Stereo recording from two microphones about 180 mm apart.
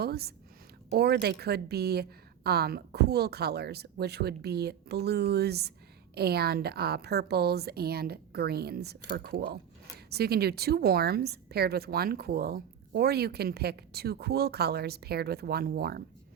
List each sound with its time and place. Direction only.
0.0 s a woman's voice: 60° right (ahead or behind)